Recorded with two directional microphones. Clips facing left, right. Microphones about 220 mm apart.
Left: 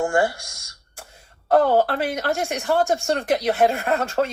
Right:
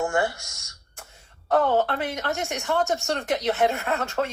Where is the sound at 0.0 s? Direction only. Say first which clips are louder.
Left 4 dB; 30° left (ahead or behind).